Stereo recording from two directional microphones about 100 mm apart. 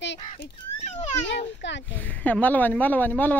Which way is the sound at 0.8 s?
90° left.